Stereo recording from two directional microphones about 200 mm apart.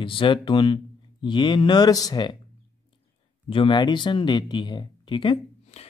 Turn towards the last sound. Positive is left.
turn(degrees=25)  # may be behind; listen again after turning